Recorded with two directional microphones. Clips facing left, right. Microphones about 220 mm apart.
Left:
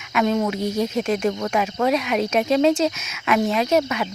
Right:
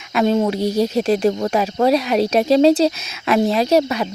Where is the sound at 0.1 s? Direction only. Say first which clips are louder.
Right 4 dB; 30° right (ahead or behind).